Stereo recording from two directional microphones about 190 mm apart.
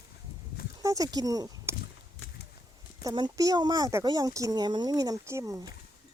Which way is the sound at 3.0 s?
20° right (ahead or behind).